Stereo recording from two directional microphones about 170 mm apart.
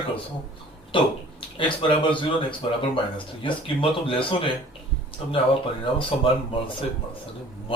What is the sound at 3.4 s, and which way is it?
Speech, 30° left (ahead or behind).